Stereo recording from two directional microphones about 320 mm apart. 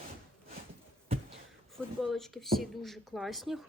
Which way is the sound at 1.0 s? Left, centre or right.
Centre.